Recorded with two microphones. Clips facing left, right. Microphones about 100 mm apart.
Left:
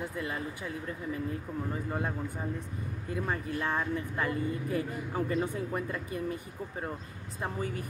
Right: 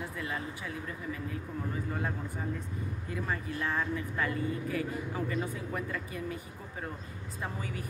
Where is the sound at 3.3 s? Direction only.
30° left (ahead or behind).